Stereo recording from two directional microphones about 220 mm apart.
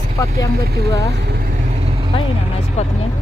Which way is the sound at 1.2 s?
45° right (ahead or behind).